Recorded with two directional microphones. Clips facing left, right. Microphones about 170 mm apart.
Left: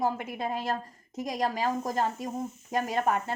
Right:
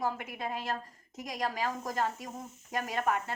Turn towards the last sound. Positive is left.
turn(degrees=30)  # may be behind; listen again after turning